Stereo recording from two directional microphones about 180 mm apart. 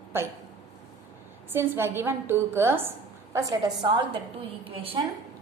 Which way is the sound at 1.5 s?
10° right (ahead or behind).